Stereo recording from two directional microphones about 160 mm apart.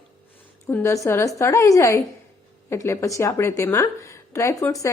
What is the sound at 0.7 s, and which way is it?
A woman's voice, 15° left (ahead or behind).